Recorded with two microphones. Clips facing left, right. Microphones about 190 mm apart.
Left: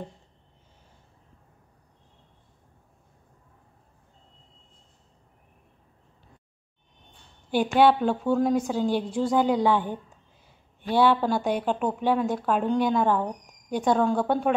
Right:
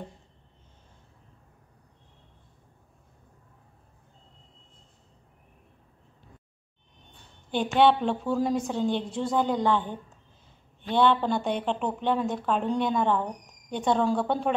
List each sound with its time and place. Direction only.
7.5 s a woman's voice: 5° left (ahead or behind)